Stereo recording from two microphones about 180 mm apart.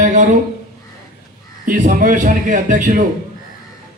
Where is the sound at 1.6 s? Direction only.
50° right (ahead or behind).